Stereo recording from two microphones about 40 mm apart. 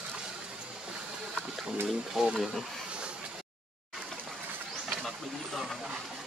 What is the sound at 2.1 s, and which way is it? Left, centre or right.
Speech, centre.